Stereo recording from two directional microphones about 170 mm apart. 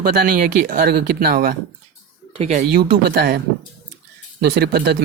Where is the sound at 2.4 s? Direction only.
45° right (ahead or behind).